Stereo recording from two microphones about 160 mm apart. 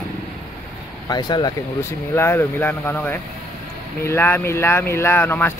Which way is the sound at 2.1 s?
15° left (ahead or behind).